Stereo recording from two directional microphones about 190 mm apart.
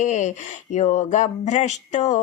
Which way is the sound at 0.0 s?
40° left (ahead or behind).